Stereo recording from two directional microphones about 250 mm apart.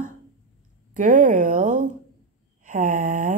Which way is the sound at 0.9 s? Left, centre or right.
Right.